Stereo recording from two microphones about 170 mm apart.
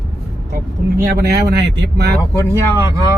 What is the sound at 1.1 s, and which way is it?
Speech, 75° right (ahead or behind).